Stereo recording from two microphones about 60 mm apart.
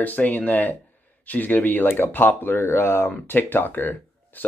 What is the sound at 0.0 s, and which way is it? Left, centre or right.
Speech, left.